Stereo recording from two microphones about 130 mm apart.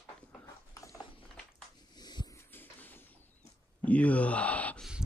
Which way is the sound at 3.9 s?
10° left (ahead or behind).